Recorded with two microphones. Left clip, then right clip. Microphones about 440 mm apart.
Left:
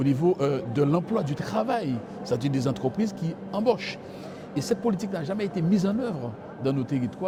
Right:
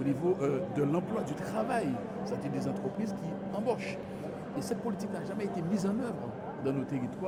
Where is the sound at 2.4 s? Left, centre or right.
Left.